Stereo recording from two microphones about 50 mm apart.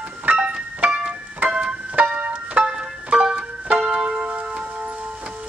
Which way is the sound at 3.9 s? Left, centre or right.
Right.